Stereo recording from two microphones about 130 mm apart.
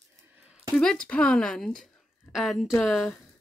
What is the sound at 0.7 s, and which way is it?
Speech, 5° left (ahead or behind).